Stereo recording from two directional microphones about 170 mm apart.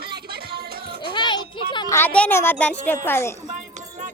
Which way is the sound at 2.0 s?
10° left (ahead or behind).